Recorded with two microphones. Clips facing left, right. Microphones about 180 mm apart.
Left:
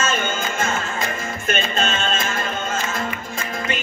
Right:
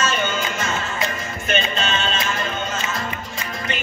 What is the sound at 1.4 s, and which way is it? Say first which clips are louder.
Music: even; 50° left (ahead or behind).